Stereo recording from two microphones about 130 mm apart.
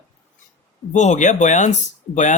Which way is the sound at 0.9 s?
65° left (ahead or behind).